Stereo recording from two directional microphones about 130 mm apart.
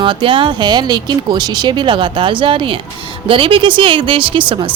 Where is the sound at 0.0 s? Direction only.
40° right (ahead or behind).